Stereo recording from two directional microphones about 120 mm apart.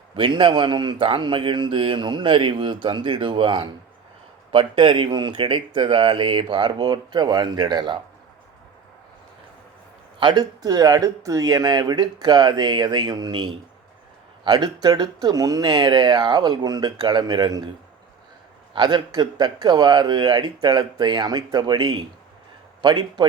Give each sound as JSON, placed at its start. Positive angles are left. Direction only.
{"t": 0.2, "sound": "speech", "side_deg": -45}
{"t": 10.2, "sound": "speech", "side_deg": -40}
{"t": 18.7, "sound": "speech", "side_deg": -40}